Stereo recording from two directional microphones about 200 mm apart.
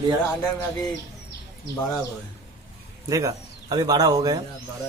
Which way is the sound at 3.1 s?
15° right (ahead or behind).